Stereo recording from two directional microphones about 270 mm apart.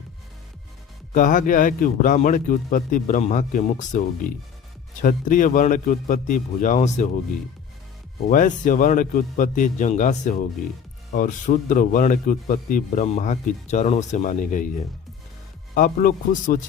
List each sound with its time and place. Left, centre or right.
1.1 s speech: left
8.3 s speech: left
15.7 s a man's voice: left